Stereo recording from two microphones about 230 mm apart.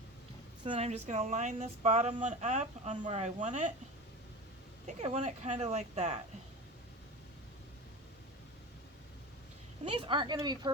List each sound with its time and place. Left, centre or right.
0.6 s speech: right
4.9 s speech: right
9.8 s speech: right